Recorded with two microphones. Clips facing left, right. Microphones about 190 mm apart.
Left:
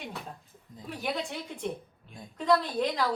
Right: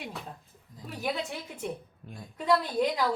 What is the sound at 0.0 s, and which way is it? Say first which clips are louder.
A woman's voice: even; centre (ahead or behind).